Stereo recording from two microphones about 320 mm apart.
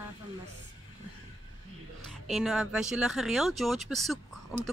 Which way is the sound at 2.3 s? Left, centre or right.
Centre.